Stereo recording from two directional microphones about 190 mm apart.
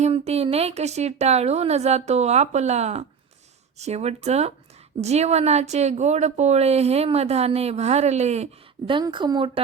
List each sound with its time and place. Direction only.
0.0 s speech: 35° right (ahead or behind)
8.9 s a woman's voice: 25° right (ahead or behind)